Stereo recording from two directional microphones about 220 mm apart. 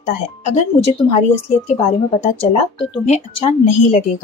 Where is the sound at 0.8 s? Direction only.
30° left (ahead or behind).